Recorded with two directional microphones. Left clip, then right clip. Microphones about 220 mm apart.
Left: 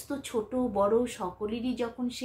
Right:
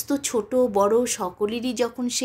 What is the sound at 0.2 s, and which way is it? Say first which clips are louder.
Speech: right 9 dB; 45° right (ahead or behind).